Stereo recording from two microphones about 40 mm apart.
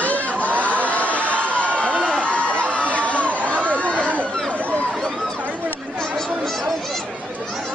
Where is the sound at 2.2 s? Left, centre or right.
Left.